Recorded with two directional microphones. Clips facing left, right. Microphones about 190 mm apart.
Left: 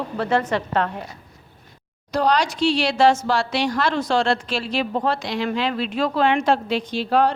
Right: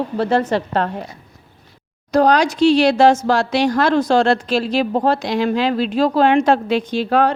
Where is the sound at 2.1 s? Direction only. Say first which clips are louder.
Right 6 dB; 45° right (ahead or behind).